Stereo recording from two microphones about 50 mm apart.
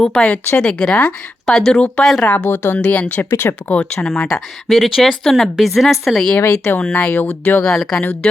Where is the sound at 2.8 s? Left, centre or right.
Left.